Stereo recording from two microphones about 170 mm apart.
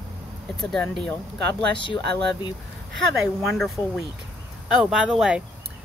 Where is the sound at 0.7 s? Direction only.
5° left (ahead or behind).